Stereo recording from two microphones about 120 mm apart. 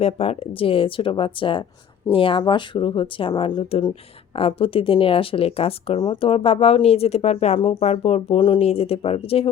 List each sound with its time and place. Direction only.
0.0 s speech: 55° left (ahead or behind)
8.4 s speech: 40° left (ahead or behind)
8.6 s speech: 55° left (ahead or behind)